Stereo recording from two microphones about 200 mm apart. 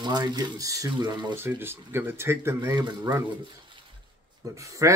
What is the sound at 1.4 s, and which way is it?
Speech, 10° right (ahead or behind).